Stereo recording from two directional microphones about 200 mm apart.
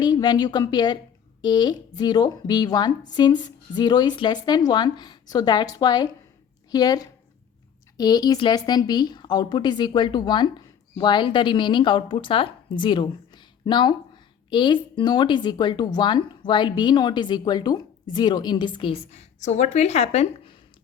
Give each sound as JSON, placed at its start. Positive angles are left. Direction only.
{"t": 0.0, "sound": "speech", "side_deg": 20}